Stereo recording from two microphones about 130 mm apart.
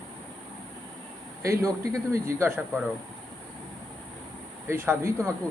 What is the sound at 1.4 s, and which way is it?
Speech, 25° right (ahead or behind).